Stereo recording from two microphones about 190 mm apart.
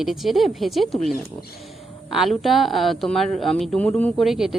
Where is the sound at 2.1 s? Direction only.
Centre (ahead or behind).